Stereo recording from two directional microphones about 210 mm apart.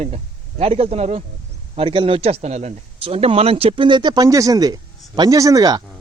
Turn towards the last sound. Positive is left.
turn(degrees=-20)  # may be behind; listen again after turning